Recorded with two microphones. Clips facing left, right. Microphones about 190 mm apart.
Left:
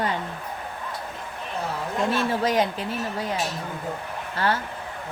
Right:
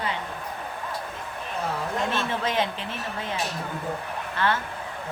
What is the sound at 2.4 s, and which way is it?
Speech, 40° left (ahead or behind).